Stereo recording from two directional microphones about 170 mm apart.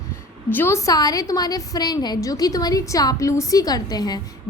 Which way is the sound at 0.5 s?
15° left (ahead or behind).